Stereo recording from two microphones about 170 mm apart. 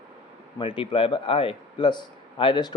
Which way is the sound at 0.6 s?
30° left (ahead or behind).